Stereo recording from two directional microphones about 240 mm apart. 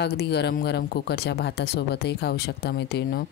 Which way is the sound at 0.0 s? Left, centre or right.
Left.